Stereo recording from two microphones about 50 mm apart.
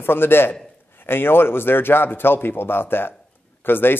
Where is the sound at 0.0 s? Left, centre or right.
Left.